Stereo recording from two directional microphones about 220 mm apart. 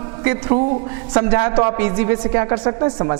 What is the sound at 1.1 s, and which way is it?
A woman's voice, 20° right (ahead or behind).